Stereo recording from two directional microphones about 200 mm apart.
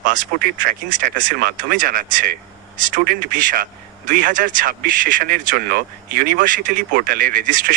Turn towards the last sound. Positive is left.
turn(degrees=-40)  # may be behind; listen again after turning